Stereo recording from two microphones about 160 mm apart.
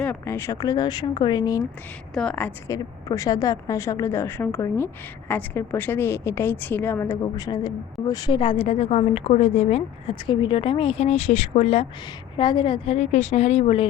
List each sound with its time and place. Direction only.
0.0 s a woman's voice: 15° left (ahead or behind)
2.1 s a woman's voice: 5° left (ahead or behind)
2.7 s a woman's voice: 25° left (ahead or behind); by 11.9 s 40° left (ahead or behind)
12.4 s a woman's voice: 30° left (ahead or behind)